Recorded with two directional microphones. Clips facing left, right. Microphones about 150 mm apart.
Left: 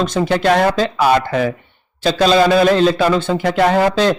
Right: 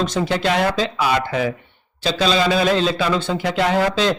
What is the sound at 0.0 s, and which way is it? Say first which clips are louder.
Speech: left 4 dB; 50° left (ahead or behind).